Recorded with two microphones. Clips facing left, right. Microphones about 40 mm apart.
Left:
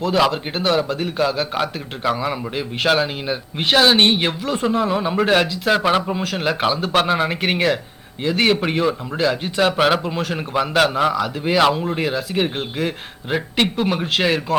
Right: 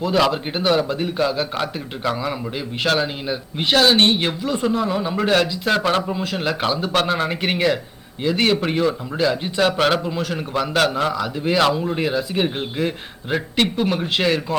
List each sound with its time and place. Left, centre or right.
0.1 s a man's voice: centre
5.8 s a man's voice: centre